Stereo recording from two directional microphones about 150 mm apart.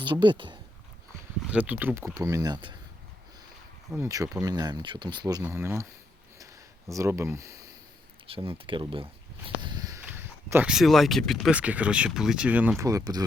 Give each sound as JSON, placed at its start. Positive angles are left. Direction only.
{"t": 0.0, "sound": "speech", "side_deg": -30}
{"t": 1.5, "sound": "speech", "side_deg": -10}
{"t": 2.1, "sound": "speech", "side_deg": -25}
{"t": 3.9, "sound": "speech", "side_deg": -20}
{"t": 6.9, "sound": "speech", "side_deg": -20}
{"t": 8.3, "sound": "speech", "side_deg": -35}
{"t": 9.6, "sound": "walk", "side_deg": -30}
{"t": 10.1, "sound": "speech", "side_deg": -15}
{"t": 11.5, "sound": "speech", "side_deg": -10}
{"t": 12.8, "sound": "speech", "side_deg": -25}